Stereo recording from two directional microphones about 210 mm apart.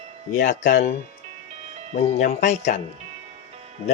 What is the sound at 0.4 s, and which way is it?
Speech, 35° left (ahead or behind).